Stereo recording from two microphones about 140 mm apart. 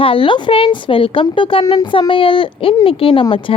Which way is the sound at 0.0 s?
40° left (ahead or behind).